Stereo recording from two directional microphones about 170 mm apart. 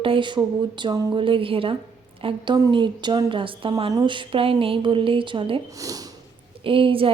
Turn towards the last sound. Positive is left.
turn(degrees=-30)  # may be behind; listen again after turning